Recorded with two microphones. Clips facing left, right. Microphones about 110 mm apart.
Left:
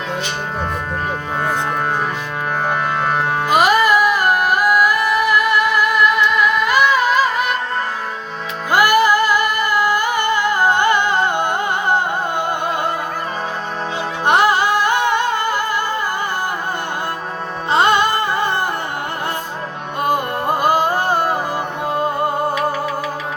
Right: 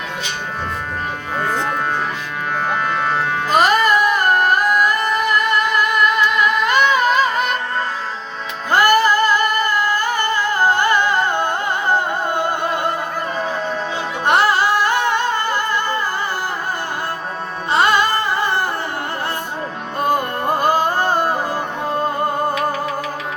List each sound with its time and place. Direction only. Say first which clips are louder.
2.6 s music: even; 10° left (ahead or behind)
8.7 s music: even; 10° left (ahead or behind)
14.3 s music: left 1 dB; 15° left (ahead or behind)
17.7 s music: left 1 dB; 20° left (ahead or behind)
20.6 s music: left 1 dB; 10° left (ahead or behind)